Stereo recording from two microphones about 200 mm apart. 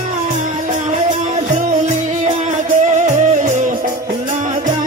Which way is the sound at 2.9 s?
40° right (ahead or behind).